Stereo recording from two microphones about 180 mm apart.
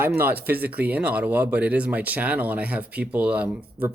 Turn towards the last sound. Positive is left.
turn(degrees=-10)  # may be behind; listen again after turning